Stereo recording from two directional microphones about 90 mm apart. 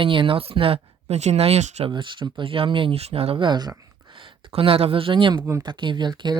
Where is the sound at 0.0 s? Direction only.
70° right (ahead or behind); by 0.9 s 90° right.